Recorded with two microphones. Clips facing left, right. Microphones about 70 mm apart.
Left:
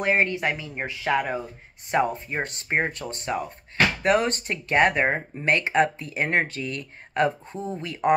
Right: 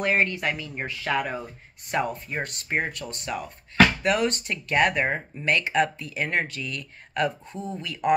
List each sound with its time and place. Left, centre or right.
0.0 s speech: centre